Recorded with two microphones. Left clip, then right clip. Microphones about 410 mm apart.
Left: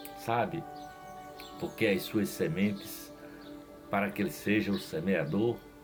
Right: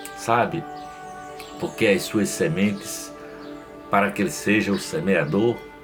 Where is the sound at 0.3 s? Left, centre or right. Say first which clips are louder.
Right 10 dB; left.